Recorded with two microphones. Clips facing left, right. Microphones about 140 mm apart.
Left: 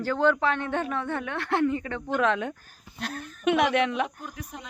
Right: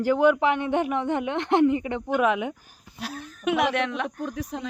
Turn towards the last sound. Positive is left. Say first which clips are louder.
# right 9 dB
turn(degrees=-90)